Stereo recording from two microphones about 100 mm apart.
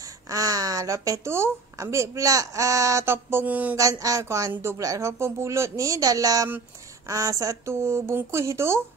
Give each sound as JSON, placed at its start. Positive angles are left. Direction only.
{"t": 0.0, "sound": "speech", "side_deg": -35}
{"t": 3.7, "sound": "speech", "side_deg": -35}